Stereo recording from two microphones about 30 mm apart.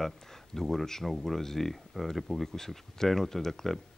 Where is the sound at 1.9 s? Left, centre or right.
Centre.